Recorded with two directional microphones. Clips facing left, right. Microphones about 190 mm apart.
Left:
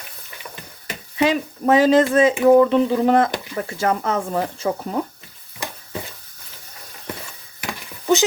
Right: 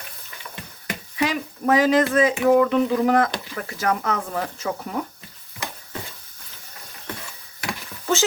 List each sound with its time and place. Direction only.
1.1 s speech: 25° left (ahead or behind)
7.7 s stir: 15° left (ahead or behind)